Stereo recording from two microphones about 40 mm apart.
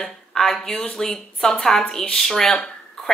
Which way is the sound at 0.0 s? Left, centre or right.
Centre.